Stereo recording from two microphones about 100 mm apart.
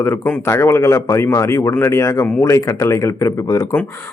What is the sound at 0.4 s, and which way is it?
Speech, 25° left (ahead or behind).